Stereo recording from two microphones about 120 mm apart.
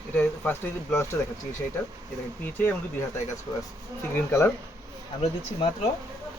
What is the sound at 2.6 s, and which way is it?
Speech, 20° left (ahead or behind).